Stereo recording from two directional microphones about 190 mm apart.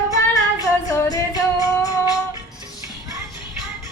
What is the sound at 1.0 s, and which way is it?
Music, 15° left (ahead or behind).